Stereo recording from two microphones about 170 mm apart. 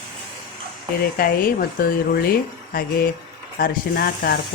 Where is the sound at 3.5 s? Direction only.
60° left (ahead or behind).